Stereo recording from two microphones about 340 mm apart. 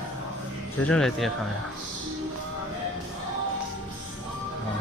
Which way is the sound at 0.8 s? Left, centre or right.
Centre.